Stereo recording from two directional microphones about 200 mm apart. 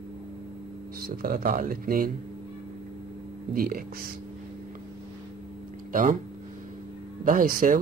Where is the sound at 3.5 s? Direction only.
50° right (ahead or behind).